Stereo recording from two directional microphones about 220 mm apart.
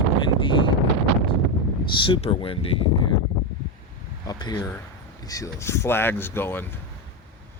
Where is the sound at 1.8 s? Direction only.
25° left (ahead or behind).